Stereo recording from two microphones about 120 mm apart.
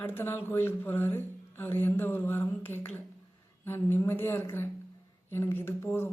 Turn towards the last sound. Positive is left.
turn(degrees=20)  # may be behind; listen again after turning